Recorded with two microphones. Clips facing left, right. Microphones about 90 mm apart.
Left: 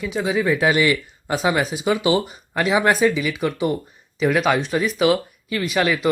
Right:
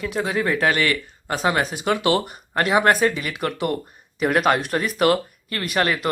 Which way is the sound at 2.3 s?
50° right (ahead or behind).